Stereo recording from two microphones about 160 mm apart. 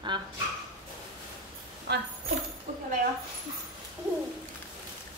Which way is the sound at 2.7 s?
50° right (ahead or behind).